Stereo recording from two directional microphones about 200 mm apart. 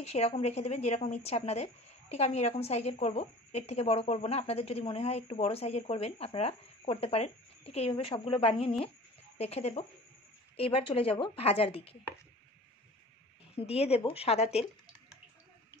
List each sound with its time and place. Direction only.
0.0 s speech: 30° left (ahead or behind)
13.6 s speech: 30° left (ahead or behind)